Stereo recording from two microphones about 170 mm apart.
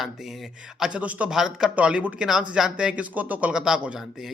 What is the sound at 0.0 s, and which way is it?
A man's voice, centre (ahead or behind).